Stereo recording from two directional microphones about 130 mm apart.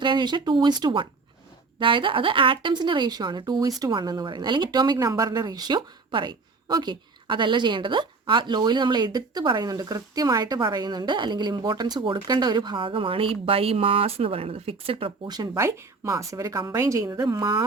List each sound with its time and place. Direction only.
0.0 s a woman's voice: 35° right (ahead or behind)
15.4 s a woman's voice: 25° right (ahead or behind)